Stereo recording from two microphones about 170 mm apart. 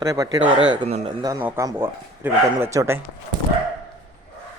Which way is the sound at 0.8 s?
35° right (ahead or behind).